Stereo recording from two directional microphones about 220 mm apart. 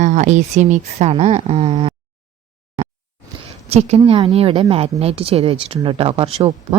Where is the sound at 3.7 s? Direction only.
30° right (ahead or behind).